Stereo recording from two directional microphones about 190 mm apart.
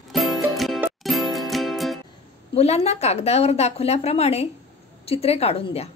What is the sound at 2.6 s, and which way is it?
A woman's voice, 35° left (ahead or behind).